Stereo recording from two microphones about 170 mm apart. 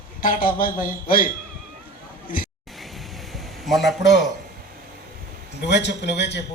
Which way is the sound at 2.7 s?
Centre (ahead or behind).